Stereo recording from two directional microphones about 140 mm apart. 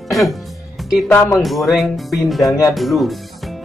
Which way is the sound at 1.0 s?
20° left (ahead or behind).